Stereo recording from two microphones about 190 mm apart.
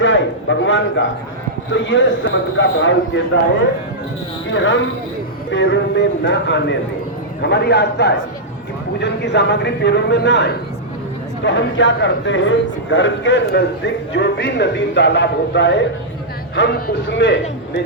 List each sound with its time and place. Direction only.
0.0 s a man's voice: 80° left
4.5 s a man's voice: 75° left (ahead or behind)